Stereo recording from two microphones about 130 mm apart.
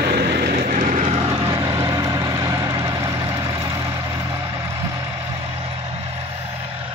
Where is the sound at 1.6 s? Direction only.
30° right (ahead or behind).